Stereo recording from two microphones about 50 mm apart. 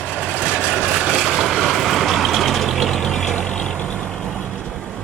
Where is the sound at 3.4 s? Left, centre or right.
Centre.